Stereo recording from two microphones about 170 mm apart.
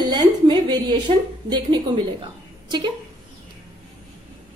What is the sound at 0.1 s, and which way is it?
A woman's voice, 25° right (ahead or behind).